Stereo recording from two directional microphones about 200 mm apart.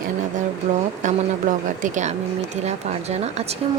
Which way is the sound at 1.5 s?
40° right (ahead or behind).